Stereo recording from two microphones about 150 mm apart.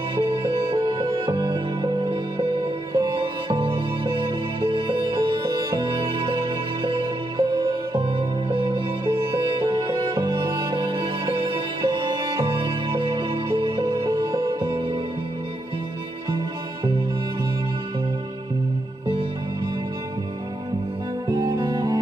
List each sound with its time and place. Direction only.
0.1 s music: 35° right (ahead or behind)
16.3 s music: 30° right (ahead or behind)
21.3 s music: 25° right (ahead or behind)